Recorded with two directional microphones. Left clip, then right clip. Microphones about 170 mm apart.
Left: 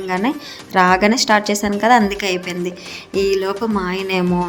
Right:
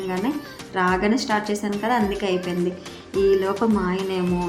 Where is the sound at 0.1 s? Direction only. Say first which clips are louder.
Left 6 dB; 40° left (ahead or behind).